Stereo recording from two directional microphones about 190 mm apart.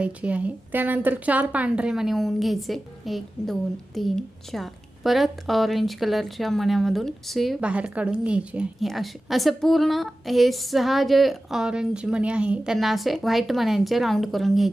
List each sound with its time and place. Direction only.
0.0 s a woman's voice: 5° right (ahead or behind)